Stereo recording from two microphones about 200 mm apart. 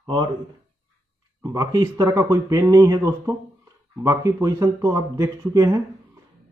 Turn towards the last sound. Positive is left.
turn(degrees=-15)  # may be behind; listen again after turning